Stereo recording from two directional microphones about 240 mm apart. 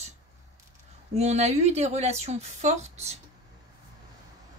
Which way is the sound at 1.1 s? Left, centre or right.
Right.